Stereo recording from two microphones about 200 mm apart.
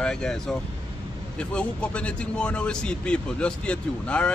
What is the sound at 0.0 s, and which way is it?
Speech, 5° left (ahead or behind).